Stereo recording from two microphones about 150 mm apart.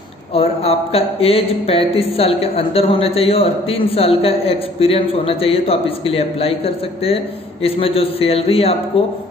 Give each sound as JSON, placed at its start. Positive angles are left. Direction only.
{"t": 0.3, "sound": "speech", "side_deg": 40}